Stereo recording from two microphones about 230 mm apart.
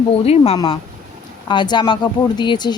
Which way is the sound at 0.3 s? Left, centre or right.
Left.